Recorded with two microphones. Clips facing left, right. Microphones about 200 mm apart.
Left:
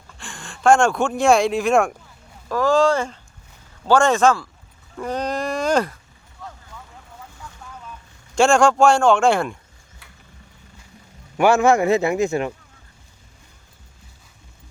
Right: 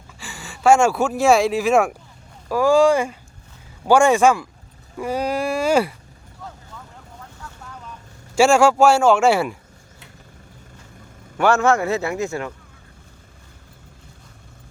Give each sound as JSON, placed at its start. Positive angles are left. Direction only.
{"t": 0.1, "sound": "speech", "side_deg": -5}
{"t": 8.4, "sound": "speech", "side_deg": -5}
{"t": 11.3, "sound": "a man's voice", "side_deg": 10}